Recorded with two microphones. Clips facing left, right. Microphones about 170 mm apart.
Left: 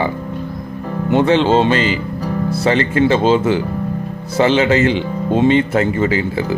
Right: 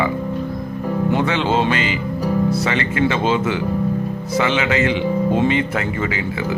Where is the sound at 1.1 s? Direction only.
30° left (ahead or behind).